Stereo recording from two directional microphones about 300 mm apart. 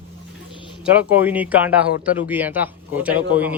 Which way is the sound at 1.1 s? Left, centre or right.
Centre.